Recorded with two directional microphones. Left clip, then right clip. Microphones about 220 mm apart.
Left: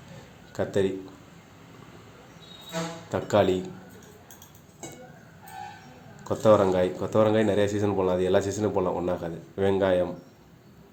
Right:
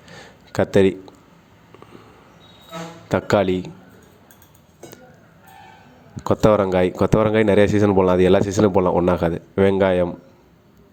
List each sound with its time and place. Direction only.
0.5 s speech: 40° right (ahead or behind)
3.1 s speech: 35° right (ahead or behind)
6.2 s speech: 40° right (ahead or behind)